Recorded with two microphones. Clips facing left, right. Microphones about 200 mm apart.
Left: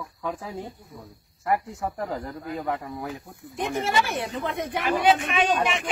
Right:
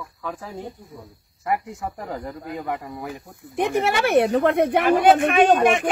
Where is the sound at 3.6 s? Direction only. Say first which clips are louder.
Right 5 dB; 65° right (ahead or behind).